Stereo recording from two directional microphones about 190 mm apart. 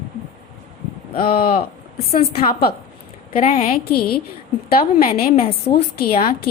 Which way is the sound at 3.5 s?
45° left (ahead or behind).